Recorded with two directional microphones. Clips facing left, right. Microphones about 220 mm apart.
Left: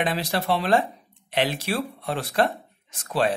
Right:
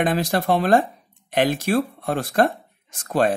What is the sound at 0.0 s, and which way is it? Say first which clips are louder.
Speech: right 5 dB; 50° right (ahead or behind).